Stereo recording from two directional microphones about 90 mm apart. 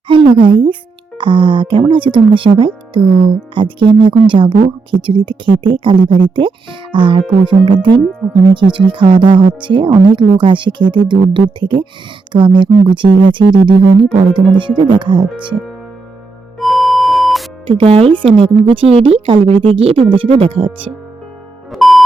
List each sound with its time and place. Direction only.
0.1 s a woman's voice: 70° right (ahead or behind)
16.6 s music: centre (ahead or behind)
17.7 s speech: 85° right
21.7 s music: centre (ahead or behind)